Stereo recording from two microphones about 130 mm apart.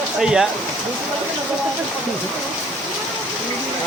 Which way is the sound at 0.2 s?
5° right (ahead or behind).